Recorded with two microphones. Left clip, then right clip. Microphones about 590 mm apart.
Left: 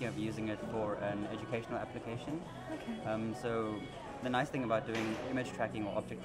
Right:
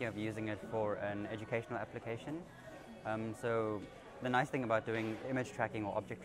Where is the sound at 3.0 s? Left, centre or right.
Right.